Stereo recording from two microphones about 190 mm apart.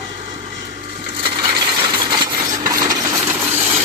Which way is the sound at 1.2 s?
25° right (ahead or behind).